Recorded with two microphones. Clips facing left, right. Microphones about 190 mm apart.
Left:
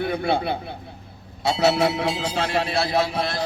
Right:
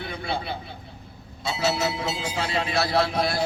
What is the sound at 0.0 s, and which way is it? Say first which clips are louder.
A man's voice: left 8 dB; 55° left (ahead or behind).